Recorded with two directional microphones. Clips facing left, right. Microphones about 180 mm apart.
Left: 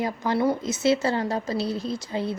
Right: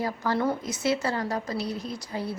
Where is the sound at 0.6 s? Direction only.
25° left (ahead or behind).